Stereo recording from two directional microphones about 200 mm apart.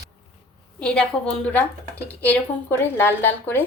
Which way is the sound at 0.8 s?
5° left (ahead or behind).